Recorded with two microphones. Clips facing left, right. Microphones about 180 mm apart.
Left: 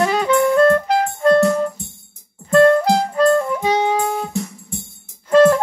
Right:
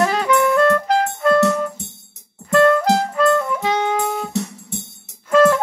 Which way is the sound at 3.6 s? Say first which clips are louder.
Left 2 dB; 15° left (ahead or behind).